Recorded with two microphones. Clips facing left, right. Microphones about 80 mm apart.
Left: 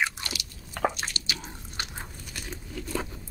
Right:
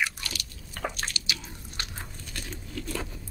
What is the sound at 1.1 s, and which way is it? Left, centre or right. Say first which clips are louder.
Drip: even; left.